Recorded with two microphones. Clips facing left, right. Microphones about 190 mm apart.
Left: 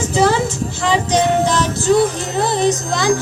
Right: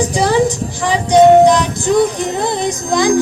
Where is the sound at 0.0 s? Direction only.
15° right (ahead or behind).